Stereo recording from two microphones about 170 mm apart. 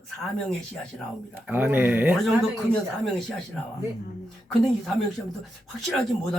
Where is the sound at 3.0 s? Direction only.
Centre (ahead or behind).